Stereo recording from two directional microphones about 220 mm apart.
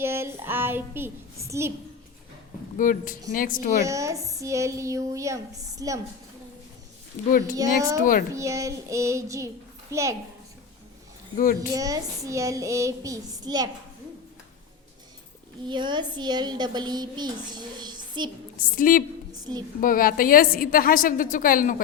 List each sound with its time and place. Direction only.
0.0 s a woman's voice: 10° right (ahead or behind)
2.7 s a woman's voice: 35° left (ahead or behind)
3.8 s a woman's voice: 15° right (ahead or behind)
7.5 s a woman's voice: 15° right (ahead or behind)
11.3 s a woman's voice: 35° left (ahead or behind)
11.7 s a woman's voice: 15° right (ahead or behind)
15.6 s a woman's voice: 20° right (ahead or behind)
18.8 s a woman's voice: 40° left (ahead or behind)